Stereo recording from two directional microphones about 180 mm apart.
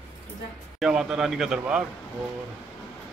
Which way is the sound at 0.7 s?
5° right (ahead or behind).